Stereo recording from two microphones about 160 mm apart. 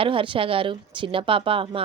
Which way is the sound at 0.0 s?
35° right (ahead or behind).